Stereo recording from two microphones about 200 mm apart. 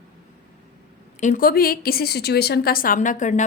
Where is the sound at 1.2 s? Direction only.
40° left (ahead or behind).